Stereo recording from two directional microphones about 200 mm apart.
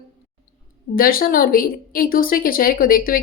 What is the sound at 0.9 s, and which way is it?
Speech, 45° left (ahead or behind).